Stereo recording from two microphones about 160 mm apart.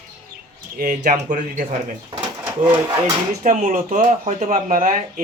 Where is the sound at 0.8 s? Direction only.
55° right (ahead or behind).